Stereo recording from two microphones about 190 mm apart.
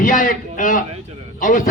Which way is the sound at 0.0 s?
45° left (ahead or behind).